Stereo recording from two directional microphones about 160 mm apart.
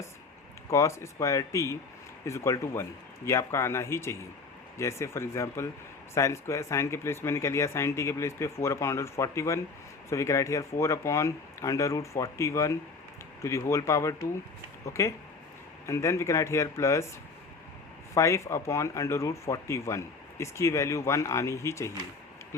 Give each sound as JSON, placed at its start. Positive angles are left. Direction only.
{"t": 0.7, "sound": "speech", "side_deg": 20}
{"t": 18.1, "sound": "speech", "side_deg": 20}